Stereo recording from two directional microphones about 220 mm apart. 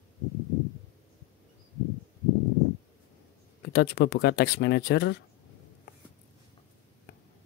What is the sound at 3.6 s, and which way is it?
Speech, 50° left (ahead or behind).